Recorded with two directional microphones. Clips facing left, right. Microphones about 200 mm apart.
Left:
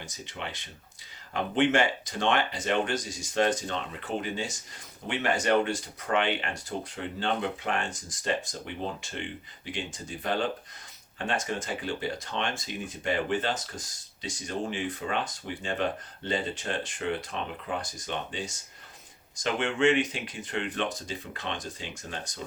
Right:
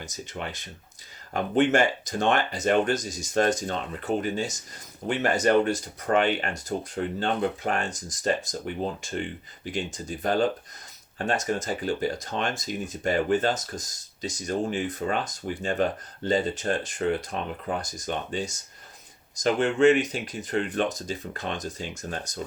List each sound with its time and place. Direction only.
0.0 s speech: 45° right (ahead or behind)